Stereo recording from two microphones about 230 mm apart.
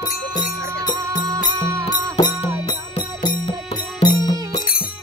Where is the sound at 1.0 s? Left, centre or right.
Centre.